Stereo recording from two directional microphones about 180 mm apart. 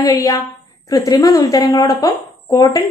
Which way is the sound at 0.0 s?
20° left (ahead or behind).